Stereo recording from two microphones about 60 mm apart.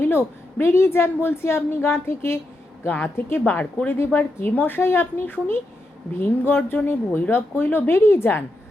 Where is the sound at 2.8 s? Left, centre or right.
Left.